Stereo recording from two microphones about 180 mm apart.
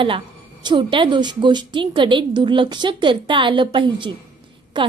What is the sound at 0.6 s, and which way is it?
A woman's voice, 25° right (ahead or behind).